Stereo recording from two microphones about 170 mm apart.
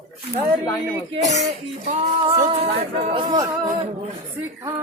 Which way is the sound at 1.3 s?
45° right (ahead or behind).